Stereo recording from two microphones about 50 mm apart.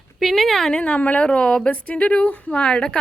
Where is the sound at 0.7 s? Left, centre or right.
Left.